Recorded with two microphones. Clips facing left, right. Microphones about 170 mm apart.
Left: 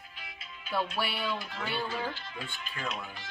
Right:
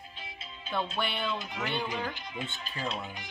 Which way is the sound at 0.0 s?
25° right (ahead or behind).